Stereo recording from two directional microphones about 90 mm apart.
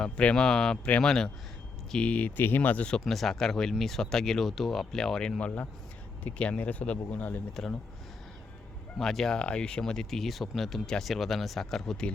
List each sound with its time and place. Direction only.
0.0 s speech: 10° left (ahead or behind)
3.0 s speech: centre (ahead or behind)
5.4 s speech: 15° left (ahead or behind)
7.5 s speech: 5° left (ahead or behind)
9.0 s speech: 5° left (ahead or behind)